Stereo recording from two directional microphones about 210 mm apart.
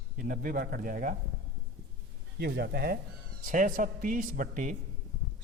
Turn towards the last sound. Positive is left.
turn(degrees=-40)  # may be behind; listen again after turning